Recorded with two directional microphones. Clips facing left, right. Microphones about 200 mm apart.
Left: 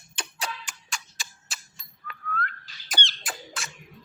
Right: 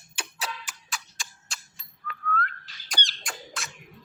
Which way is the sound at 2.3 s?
5° left (ahead or behind).